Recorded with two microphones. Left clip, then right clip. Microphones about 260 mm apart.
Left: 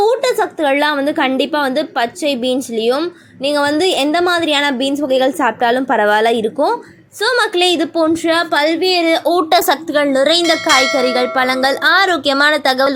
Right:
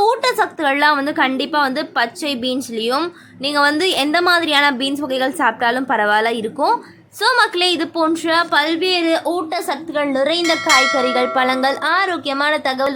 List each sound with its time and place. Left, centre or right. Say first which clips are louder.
0.0 s a woman's voice: left 2 dB; centre
9.3 s a woman's voice: left 9 dB; left